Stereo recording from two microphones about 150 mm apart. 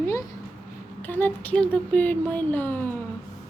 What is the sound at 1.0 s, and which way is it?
Speech, 15° left (ahead or behind).